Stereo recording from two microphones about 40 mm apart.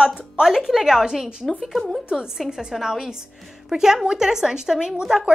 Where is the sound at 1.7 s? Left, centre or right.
Centre.